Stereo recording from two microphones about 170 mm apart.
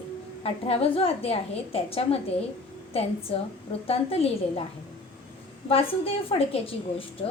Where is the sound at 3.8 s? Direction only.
35° left (ahead or behind).